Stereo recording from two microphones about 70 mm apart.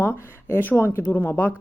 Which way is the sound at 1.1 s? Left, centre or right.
Left.